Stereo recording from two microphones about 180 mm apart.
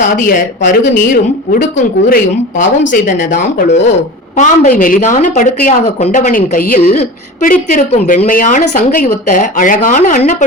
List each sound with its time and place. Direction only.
0.2 s speech: 50° left (ahead or behind)